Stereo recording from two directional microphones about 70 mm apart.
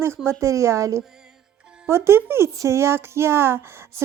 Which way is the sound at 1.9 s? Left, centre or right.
Right.